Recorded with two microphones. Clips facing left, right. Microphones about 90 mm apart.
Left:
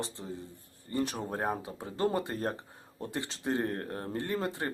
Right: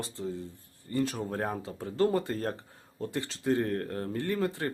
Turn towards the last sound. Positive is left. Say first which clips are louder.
# right 3 dB
turn(degrees=20)  # may be behind; listen again after turning